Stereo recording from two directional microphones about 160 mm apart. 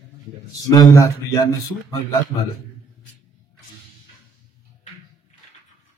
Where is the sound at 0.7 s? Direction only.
20° left (ahead or behind).